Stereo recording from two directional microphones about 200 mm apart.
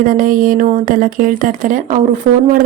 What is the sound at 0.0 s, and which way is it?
Speech, 45° right (ahead or behind).